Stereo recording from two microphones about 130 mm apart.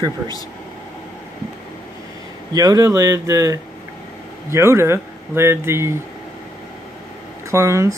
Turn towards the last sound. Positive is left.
turn(degrees=-20)  # may be behind; listen again after turning